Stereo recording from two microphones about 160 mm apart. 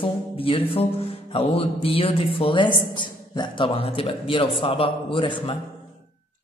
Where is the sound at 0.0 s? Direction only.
35° left (ahead or behind).